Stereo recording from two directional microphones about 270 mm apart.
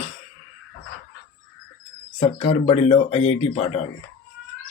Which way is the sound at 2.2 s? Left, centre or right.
Left.